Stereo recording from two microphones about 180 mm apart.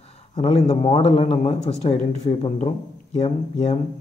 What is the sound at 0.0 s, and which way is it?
A man's voice, 35° left (ahead or behind).